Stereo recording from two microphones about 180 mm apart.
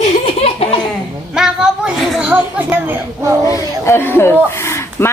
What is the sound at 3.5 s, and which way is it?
Speech, 15° left (ahead or behind).